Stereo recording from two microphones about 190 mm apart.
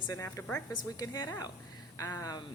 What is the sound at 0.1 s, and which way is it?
A woman's voice, 15° left (ahead or behind).